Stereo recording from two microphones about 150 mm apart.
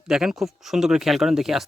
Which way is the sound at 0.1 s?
5° right (ahead or behind).